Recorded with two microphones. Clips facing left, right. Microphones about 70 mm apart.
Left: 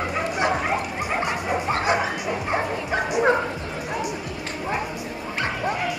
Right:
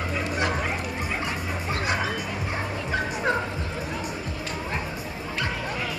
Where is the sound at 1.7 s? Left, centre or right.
Left.